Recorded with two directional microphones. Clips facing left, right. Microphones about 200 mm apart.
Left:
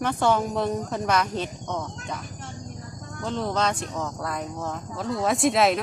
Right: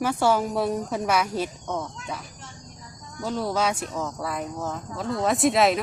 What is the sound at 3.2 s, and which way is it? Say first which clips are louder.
Speech: right 1 dB; 5° right (ahead or behind).